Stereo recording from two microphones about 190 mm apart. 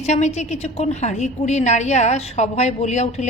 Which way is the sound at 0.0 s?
35° left (ahead or behind).